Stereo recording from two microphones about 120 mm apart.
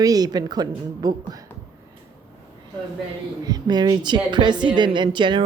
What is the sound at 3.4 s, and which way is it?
Speech, 35° right (ahead or behind).